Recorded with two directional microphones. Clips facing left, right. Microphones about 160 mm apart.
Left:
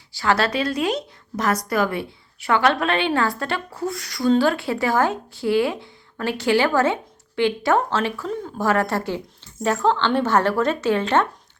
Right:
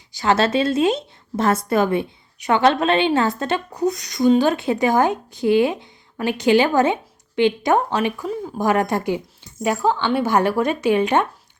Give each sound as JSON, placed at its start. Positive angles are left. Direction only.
{"t": 0.1, "sound": "a woman's voice", "side_deg": -20}